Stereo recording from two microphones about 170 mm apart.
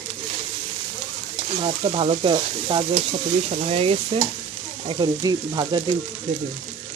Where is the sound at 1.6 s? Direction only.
35° right (ahead or behind).